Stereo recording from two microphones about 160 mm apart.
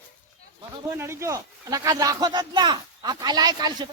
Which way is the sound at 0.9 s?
15° right (ahead or behind).